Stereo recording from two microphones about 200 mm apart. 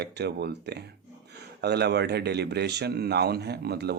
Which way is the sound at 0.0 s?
55° right (ahead or behind).